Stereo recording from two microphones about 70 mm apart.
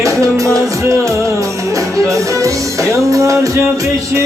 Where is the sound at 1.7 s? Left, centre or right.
Right.